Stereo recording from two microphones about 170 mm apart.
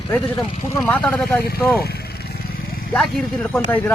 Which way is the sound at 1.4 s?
65° left (ahead or behind).